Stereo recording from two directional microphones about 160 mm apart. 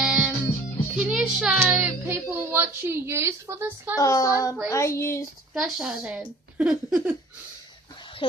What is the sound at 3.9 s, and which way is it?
Speech, 20° left (ahead or behind).